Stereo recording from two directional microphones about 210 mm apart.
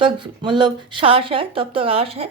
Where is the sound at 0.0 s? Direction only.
25° right (ahead or behind).